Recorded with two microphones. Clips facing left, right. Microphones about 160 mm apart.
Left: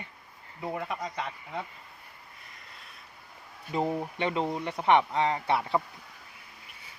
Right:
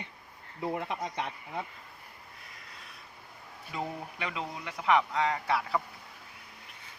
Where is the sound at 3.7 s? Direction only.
30° left (ahead or behind).